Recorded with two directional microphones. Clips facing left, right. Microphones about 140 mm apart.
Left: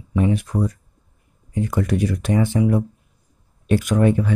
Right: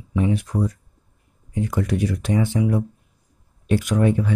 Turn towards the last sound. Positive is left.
turn(degrees=55)  # may be behind; listen again after turning